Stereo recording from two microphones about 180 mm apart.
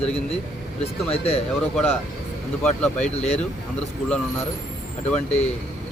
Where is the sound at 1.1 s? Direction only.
35° left (ahead or behind).